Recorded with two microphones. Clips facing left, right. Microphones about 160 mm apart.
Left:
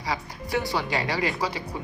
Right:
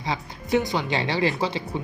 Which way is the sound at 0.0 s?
20° right (ahead or behind).